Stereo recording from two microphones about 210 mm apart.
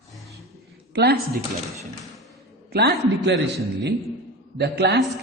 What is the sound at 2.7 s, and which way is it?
Speech, 50° right (ahead or behind).